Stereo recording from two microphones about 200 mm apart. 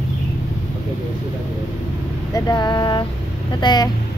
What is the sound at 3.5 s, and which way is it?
Speech, 20° left (ahead or behind).